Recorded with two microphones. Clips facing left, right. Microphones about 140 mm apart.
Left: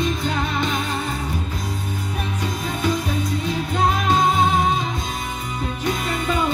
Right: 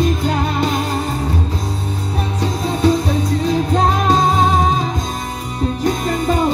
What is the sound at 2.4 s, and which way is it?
Music, 35° right (ahead or behind).